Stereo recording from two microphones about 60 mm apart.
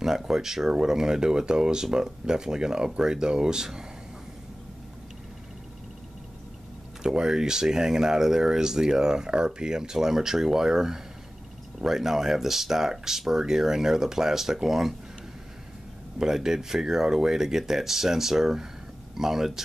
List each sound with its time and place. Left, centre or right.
0.0 s speech: centre
7.0 s speech: centre
16.2 s speech: centre